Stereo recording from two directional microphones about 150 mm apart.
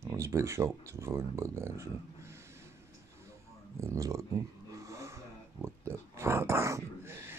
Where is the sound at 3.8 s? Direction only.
20° right (ahead or behind).